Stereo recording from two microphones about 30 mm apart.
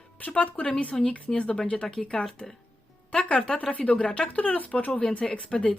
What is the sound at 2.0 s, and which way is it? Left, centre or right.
Speech, centre.